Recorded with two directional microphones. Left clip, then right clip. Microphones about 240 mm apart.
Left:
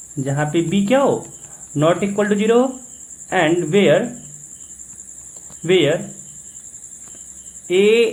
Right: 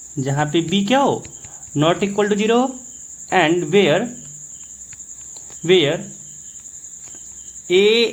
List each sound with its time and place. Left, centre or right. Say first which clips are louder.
0.2 s speech: even; right
5.6 s speech: even; right
7.7 s speech: even; right